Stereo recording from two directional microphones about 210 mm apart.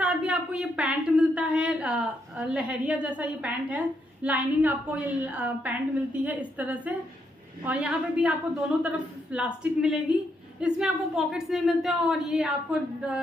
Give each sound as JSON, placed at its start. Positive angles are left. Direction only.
{"t": 0.0, "sound": "a woman's voice", "side_deg": -5}